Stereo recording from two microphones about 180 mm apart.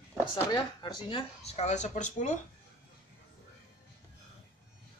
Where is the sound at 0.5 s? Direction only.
25° left (ahead or behind); by 2.3 s 45° left (ahead or behind).